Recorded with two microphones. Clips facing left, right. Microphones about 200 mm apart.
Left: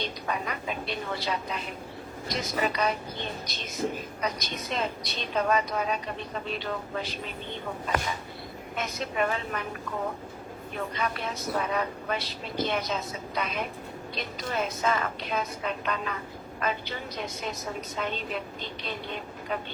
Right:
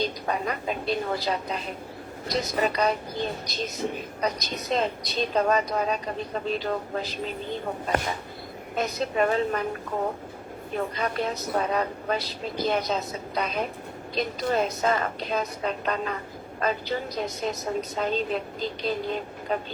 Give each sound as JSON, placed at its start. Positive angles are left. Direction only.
{"t": 0.0, "sound": "a woman's voice", "side_deg": -35}
{"t": 4.7, "sound": "a woman's voice", "side_deg": -40}
{"t": 10.8, "sound": "a woman's voice", "side_deg": -40}